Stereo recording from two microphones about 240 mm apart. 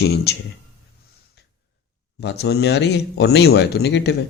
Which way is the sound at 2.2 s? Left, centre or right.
Left.